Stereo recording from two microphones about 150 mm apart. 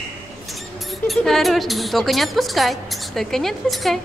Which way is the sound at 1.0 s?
Centre (ahead or behind).